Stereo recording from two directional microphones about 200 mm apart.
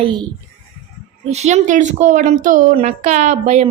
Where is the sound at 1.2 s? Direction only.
35° right (ahead or behind).